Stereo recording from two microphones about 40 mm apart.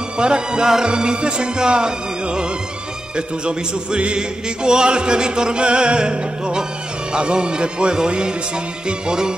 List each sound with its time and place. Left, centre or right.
0.2 s music: right